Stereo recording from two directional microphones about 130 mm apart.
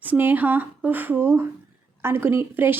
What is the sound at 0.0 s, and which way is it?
A woman's voice, 15° right (ahead or behind).